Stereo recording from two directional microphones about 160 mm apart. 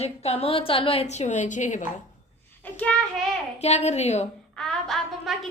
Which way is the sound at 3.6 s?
40° left (ahead or behind).